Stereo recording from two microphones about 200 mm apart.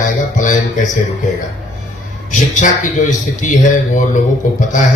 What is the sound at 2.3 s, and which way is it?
Speech, 40° left (ahead or behind).